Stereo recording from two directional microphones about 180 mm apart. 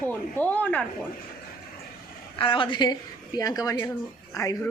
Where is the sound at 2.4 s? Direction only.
30° left (ahead or behind).